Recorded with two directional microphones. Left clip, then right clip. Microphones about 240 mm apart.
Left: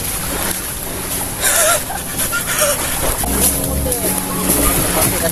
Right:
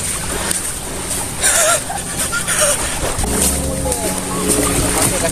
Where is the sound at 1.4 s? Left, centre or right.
Centre.